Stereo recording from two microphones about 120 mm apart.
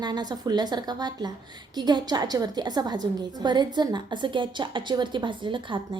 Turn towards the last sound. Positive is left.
turn(degrees=-45)  # may be behind; listen again after turning